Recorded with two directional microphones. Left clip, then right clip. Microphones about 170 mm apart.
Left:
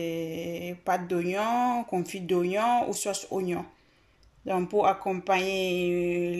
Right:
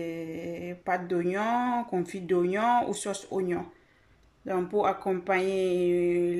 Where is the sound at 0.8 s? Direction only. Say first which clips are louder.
Left 1 dB; 5° left (ahead or behind).